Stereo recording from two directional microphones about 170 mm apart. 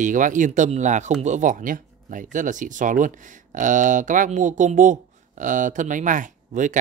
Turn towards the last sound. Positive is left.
turn(degrees=-45)  # may be behind; listen again after turning